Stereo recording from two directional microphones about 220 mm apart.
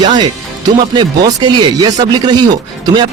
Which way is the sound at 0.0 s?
20° right (ahead or behind).